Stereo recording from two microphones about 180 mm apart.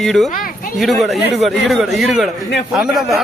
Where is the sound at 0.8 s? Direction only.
Centre (ahead or behind).